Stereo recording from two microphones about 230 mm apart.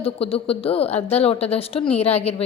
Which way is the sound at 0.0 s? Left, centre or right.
Left.